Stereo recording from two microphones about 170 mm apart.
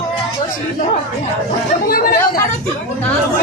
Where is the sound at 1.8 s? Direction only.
60° left (ahead or behind).